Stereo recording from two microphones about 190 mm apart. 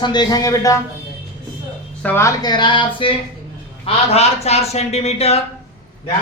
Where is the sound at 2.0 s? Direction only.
10° left (ahead or behind); by 5.4 s 35° left (ahead or behind).